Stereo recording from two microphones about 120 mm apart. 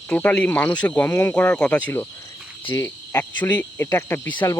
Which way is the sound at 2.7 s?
20° left (ahead or behind).